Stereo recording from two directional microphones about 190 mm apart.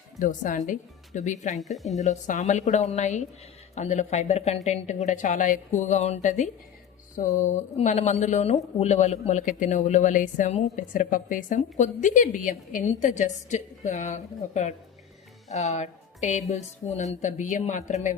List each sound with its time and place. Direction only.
0.2 s speech: 45° left (ahead or behind)
1.5 s speech: centre (ahead or behind)
2.0 s speech: 40° left (ahead or behind)